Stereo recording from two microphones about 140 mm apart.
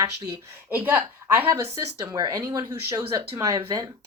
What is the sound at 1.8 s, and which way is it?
Speech, 25° right (ahead or behind).